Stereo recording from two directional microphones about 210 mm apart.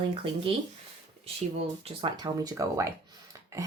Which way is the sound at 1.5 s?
25° right (ahead or behind).